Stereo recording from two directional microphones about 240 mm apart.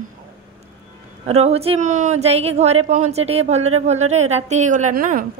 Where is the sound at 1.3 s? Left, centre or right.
Right.